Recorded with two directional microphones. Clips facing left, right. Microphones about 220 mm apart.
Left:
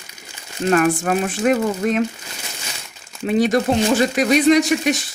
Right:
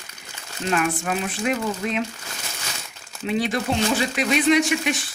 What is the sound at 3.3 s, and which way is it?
Speech, 45° left (ahead or behind).